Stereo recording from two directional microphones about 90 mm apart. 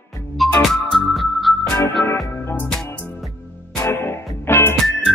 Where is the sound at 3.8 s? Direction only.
25° left (ahead or behind).